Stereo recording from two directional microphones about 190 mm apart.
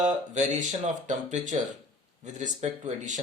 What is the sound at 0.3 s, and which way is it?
Speech, 40° right (ahead or behind).